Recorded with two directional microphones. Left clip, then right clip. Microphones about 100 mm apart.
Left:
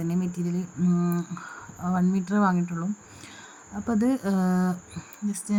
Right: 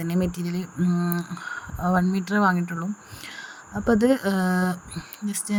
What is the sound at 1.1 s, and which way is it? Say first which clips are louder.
Speech: right 4 dB; 40° right (ahead or behind).